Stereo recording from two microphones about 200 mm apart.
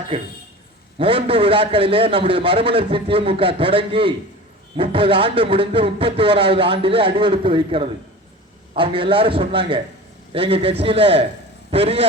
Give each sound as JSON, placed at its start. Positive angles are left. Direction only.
{"t": 0.9, "sound": "a man's voice", "side_deg": -25}